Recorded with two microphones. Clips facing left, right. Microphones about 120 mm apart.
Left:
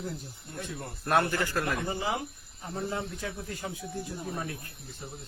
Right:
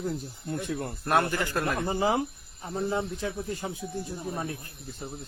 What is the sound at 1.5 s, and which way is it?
Speech, 25° right (ahead or behind).